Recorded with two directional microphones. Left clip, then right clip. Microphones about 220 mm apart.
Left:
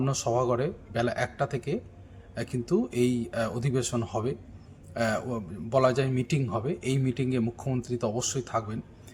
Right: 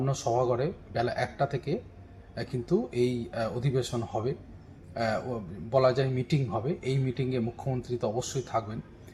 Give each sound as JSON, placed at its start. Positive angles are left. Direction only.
{"t": 0.0, "sound": "a man's voice", "side_deg": 15}